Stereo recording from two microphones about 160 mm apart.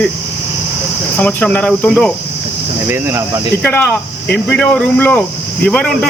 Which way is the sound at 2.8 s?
15° right (ahead or behind).